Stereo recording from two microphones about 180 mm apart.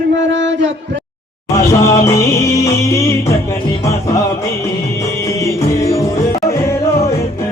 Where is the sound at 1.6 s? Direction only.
15° left (ahead or behind).